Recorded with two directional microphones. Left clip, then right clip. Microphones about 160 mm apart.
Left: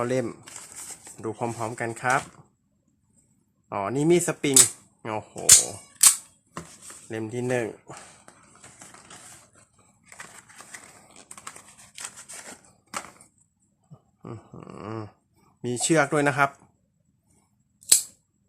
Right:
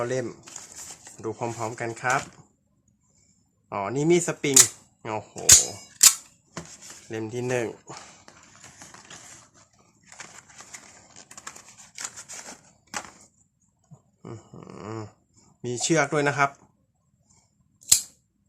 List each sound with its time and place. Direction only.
0.0 s speech: 40° left (ahead or behind)
1.0 s a sound: 15° left (ahead or behind)
1.3 s speech: 25° left (ahead or behind)
3.7 s speech: 25° left (ahead or behind)
7.1 s speech: 20° left (ahead or behind)
8.6 s a sound: 10° right (ahead or behind)
10.2 s a sound: centre (ahead or behind)
11.9 s scissors: 15° left (ahead or behind)
14.2 s dog: 25° left (ahead or behind)
15.6 s speech: 30° left (ahead or behind)